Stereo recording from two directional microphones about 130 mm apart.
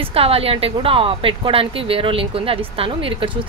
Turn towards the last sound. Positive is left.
turn(degrees=-45)  # may be behind; listen again after turning